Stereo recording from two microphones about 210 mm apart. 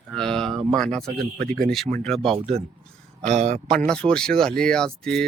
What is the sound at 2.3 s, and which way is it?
A man's voice, 30° right (ahead or behind).